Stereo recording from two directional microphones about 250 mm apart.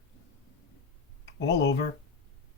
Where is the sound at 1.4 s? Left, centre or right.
Left.